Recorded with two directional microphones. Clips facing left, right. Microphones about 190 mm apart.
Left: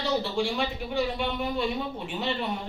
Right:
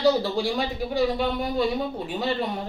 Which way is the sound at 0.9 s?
40° right (ahead or behind).